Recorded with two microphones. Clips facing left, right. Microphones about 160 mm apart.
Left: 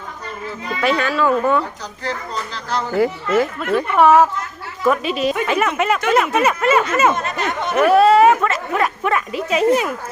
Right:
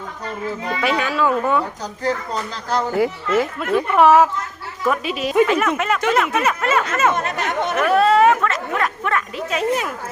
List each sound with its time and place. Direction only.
0.8 s speech: 10° right (ahead or behind)
2.9 s speech: 10° right (ahead or behind)
4.9 s a sound: 5° right (ahead or behind)
5.5 s a sound: 5° left (ahead or behind)
7.2 s speech: 60° right (ahead or behind)
7.8 s speech: 5° left (ahead or behind)